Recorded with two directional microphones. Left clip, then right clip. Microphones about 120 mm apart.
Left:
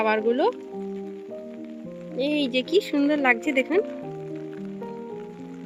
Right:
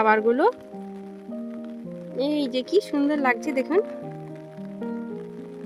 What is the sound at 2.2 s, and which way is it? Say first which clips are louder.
Speech: left 1 dB; 15° right (ahead or behind).